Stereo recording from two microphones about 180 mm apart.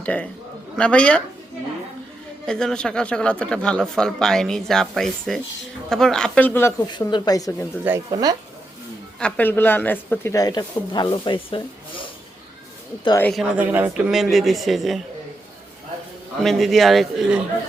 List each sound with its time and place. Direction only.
0.0 s a man's voice: 10° left (ahead or behind)
2.5 s speech: 5° left (ahead or behind)
6.8 s speech: 25° left (ahead or behind)
7.9 s speech: 20° right (ahead or behind)
9.1 s speech: 10° left (ahead or behind); by 12.0 s 30° left (ahead or behind)
13.1 s speech: 15° left (ahead or behind)
13.3 s speech: 5° right (ahead or behind)
16.4 s speech: centre (ahead or behind)